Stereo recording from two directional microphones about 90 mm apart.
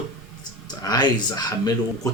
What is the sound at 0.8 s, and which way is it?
Speech, 50° left (ahead or behind).